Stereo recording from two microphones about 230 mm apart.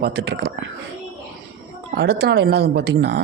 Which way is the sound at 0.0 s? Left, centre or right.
Right.